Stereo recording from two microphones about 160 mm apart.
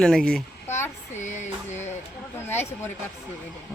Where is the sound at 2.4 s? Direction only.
15° left (ahead or behind).